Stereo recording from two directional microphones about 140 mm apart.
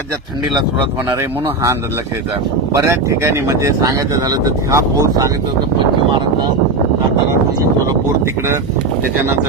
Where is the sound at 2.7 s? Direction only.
20° right (ahead or behind).